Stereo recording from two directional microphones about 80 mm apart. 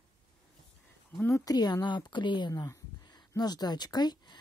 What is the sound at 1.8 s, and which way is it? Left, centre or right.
Speech, left.